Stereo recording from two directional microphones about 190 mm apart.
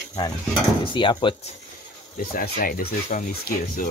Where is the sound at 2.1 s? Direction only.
55° left (ahead or behind).